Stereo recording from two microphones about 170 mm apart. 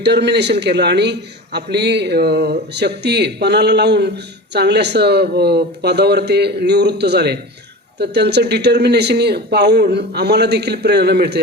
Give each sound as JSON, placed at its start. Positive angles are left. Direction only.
{"t": 0.0, "sound": "a man's voice", "side_deg": -80}